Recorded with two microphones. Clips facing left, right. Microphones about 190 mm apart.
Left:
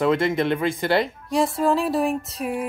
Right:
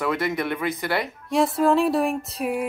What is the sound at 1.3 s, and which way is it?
Music, centre (ahead or behind).